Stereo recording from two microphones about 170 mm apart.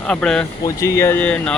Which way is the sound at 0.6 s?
20° left (ahead or behind).